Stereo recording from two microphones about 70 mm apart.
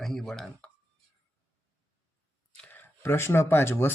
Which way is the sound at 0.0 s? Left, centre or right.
Centre.